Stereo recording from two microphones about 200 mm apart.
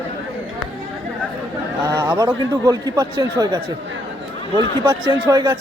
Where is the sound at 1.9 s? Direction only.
15° right (ahead or behind).